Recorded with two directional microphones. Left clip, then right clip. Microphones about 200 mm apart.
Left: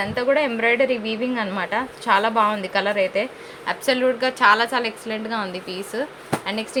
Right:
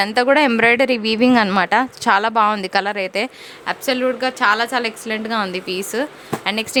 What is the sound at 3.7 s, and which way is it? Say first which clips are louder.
A woman's voice: right 1 dB; 25° right (ahead or behind).